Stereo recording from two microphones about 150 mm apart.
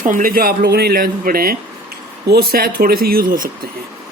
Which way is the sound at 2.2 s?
90° right.